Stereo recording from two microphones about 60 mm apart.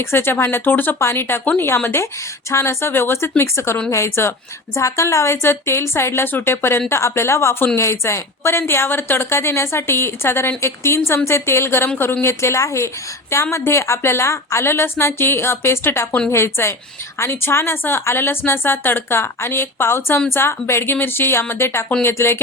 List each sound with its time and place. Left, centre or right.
0.0 s a woman's voice: left
4.8 s a woman's voice: left